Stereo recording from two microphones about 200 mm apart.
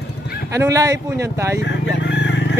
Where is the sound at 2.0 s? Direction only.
65° left (ahead or behind).